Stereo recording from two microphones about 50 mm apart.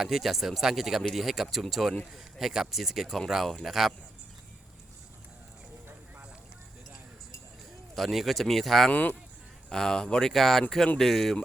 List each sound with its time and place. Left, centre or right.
0.0 s speech: centre
7.9 s speech: centre
8.9 s speech: left
9.6 s speech: centre